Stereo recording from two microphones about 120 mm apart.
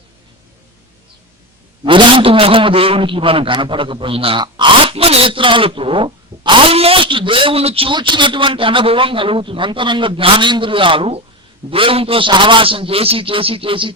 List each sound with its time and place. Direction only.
1.8 s a man's voice: 45° right (ahead or behind)